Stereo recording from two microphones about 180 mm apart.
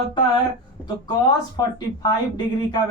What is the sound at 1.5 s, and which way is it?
Speech, 25° left (ahead or behind).